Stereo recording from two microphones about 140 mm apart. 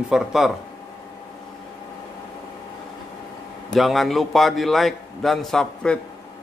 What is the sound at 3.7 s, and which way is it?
Speech, centre (ahead or behind).